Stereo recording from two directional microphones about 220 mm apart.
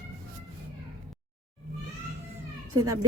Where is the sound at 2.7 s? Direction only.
85° right.